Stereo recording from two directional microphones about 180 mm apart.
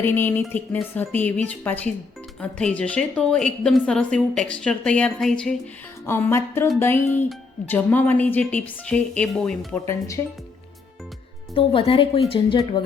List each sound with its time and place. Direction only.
0.0 s a woman's voice: 10° left (ahead or behind)
11.5 s speech: 30° left (ahead or behind)